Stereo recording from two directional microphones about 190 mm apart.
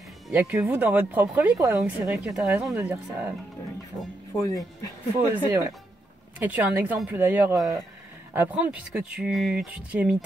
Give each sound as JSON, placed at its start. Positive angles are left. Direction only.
{"t": 0.3, "sound": "speech", "side_deg": -10}
{"t": 4.4, "sound": "speech", "side_deg": 15}
{"t": 5.1, "sound": "speech", "side_deg": -10}